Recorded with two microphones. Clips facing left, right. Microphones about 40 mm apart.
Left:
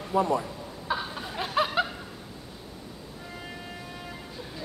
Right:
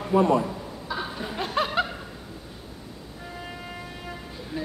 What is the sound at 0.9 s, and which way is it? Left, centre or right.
Chuckle, left.